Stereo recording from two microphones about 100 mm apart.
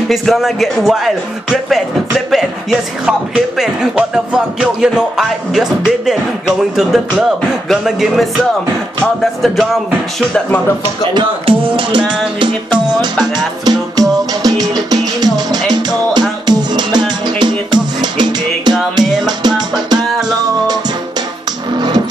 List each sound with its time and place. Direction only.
0.1 s speech: centre (ahead or behind)
11.1 s music: 65° right (ahead or behind)
13.2 s music: 40° right (ahead or behind)